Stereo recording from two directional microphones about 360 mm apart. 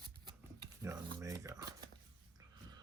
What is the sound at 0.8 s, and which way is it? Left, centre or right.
Speech, centre.